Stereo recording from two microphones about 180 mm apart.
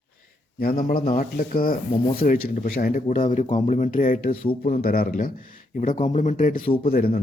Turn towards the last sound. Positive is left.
turn(degrees=55)  # may be behind; listen again after turning